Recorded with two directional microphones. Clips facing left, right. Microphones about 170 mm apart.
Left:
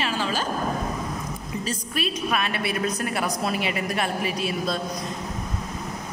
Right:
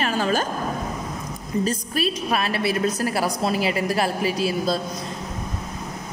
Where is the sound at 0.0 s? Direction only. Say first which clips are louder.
Right 4 dB; 50° right (ahead or behind).